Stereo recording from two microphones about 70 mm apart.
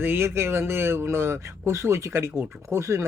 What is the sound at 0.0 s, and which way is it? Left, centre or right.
Speech, right.